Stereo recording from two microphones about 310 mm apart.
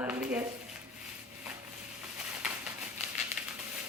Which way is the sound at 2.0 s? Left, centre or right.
Centre.